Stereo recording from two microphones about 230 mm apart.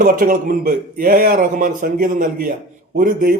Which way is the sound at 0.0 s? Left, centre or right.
Right.